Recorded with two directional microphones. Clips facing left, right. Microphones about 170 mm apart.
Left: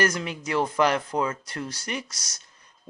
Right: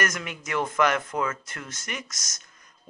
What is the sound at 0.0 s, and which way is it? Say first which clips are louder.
Speech: left 4 dB; 30° left (ahead or behind).